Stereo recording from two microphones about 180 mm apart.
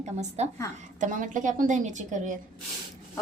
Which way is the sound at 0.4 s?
40° right (ahead or behind).